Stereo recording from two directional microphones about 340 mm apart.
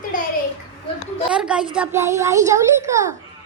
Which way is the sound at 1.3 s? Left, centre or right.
Centre.